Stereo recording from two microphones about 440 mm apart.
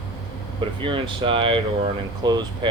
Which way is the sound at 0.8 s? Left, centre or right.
Centre.